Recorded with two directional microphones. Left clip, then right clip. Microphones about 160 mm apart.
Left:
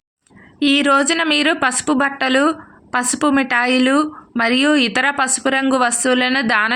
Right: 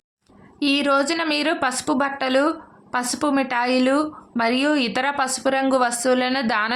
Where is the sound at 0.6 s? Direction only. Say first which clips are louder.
Left 5 dB; 20° left (ahead or behind).